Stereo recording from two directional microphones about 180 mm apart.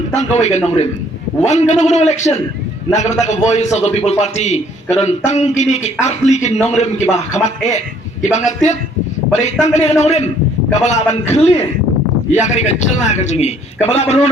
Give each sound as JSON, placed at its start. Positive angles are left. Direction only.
{"t": 0.1, "sound": "a man's voice", "side_deg": 40}